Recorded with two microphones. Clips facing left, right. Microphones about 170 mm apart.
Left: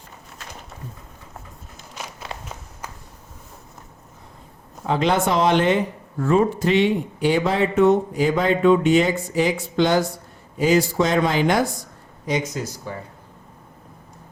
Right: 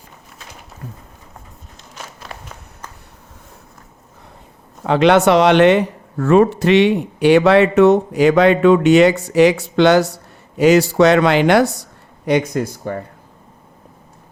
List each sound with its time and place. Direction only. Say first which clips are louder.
4.8 s speech: right 8 dB; 75° right (ahead or behind); by 13.0 s 55° right (ahead or behind)